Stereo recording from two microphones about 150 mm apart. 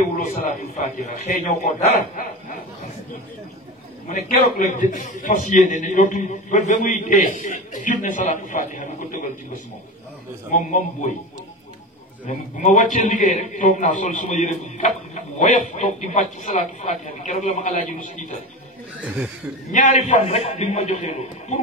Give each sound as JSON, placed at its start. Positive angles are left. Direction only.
{"t": 0.2, "sound": "a man's voice", "side_deg": 60}
{"t": 4.1, "sound": "a man's voice", "side_deg": 55}
{"t": 10.5, "sound": "a man's voice", "side_deg": 60}
{"t": 12.3, "sound": "a man's voice", "side_deg": 55}
{"t": 19.7, "sound": "speech", "side_deg": 55}